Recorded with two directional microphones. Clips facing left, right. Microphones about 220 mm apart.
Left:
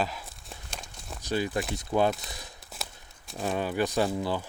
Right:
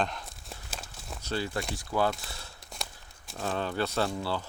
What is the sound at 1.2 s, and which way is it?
Speech, 15° left (ahead or behind).